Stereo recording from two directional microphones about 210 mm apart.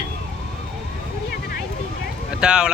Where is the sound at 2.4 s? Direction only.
5° right (ahead or behind).